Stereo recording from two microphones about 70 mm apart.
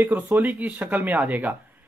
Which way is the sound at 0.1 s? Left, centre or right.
Right.